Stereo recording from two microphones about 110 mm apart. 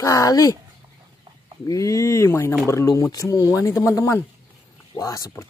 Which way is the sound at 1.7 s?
30° left (ahead or behind).